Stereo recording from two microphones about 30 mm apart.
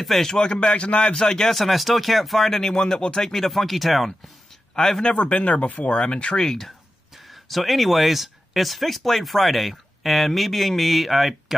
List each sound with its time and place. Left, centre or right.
0.3 s speech: left
0.6 s a man's voice: left
1.1 s speech: left
1.5 s speech: centre
2.7 s speech: left
3.4 s speech: centre
4.7 s speech: centre
5.1 s speech: left
6.3 s speech: centre
7.2 s speech: centre